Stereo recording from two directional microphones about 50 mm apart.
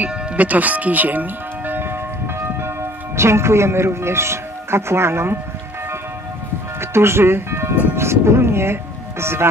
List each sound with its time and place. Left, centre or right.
0.0 s music: right
3.2 s speech: right
6.8 s speech: right